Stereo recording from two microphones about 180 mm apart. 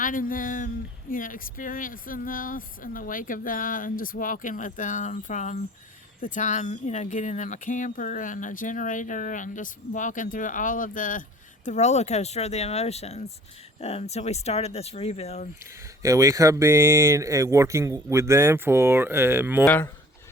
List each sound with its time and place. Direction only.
0.0 s speech: 50° left (ahead or behind)
16.0 s speech: 15° right (ahead or behind)
19.6 s speech: 10° left (ahead or behind)